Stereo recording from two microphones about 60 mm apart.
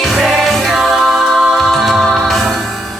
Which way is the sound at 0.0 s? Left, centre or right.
Centre.